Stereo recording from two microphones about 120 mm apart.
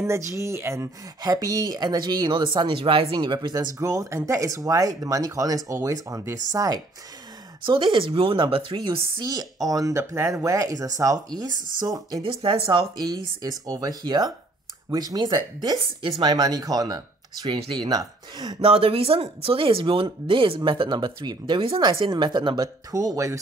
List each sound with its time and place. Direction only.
0.3 s speech: 25° right (ahead or behind)
7.6 s speech: 45° right (ahead or behind)
12.2 s speech: 50° right (ahead or behind)
12.9 s speech: 30° right (ahead or behind)
18.7 s speech: 50° right (ahead or behind); by 23.4 s 25° right (ahead or behind)